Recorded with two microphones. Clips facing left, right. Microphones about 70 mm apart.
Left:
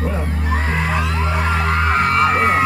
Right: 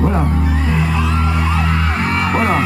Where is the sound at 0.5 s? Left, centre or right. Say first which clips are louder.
Right 2 dB; left.